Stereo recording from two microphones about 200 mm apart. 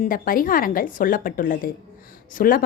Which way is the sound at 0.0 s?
45° left (ahead or behind).